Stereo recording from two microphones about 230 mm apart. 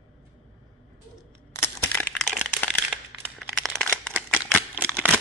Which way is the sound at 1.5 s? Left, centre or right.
Centre.